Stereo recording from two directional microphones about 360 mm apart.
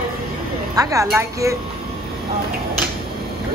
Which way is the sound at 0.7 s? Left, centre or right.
Centre.